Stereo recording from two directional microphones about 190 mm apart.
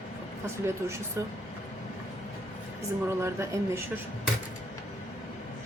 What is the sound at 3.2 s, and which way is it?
Speech, 15° right (ahead or behind).